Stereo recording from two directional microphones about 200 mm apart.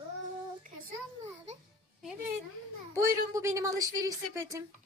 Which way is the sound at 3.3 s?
15° right (ahead or behind).